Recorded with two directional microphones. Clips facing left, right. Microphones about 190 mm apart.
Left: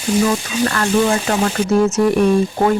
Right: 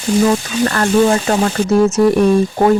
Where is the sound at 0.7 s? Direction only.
40° right (ahead or behind).